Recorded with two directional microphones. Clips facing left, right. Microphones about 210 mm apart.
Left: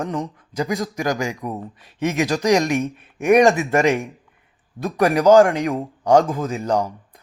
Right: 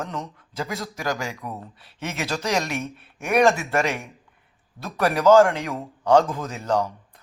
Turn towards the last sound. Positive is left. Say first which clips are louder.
# left 3 dB
turn(degrees=15)  # may be behind; listen again after turning